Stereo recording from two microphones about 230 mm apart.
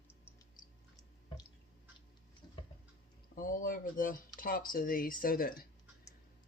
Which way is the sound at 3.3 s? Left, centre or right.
Left.